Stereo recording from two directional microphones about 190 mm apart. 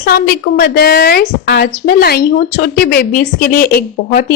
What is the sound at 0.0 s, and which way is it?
A woman's voice, 55° left (ahead or behind).